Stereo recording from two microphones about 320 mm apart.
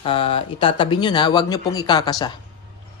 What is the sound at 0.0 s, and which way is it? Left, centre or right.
Speech, centre.